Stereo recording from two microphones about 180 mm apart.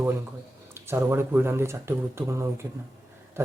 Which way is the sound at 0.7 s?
15° right (ahead or behind).